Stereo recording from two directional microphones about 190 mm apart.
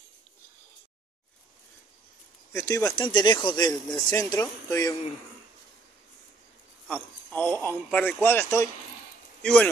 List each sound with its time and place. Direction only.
2.5 s speech: 15° left (ahead or behind)
6.9 s speech: 5° left (ahead or behind)